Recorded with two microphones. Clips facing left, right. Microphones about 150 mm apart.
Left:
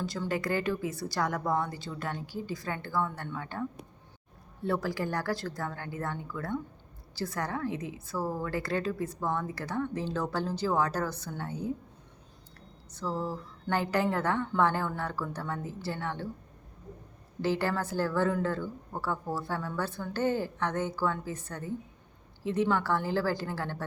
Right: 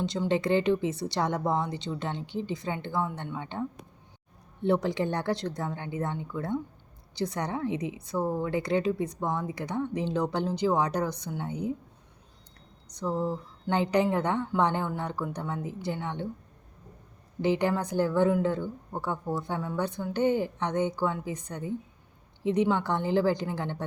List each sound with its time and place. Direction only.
0.0 s a woman's voice: 20° right (ahead or behind)
12.9 s a woman's voice: 20° right (ahead or behind)
17.4 s a woman's voice: 20° right (ahead or behind)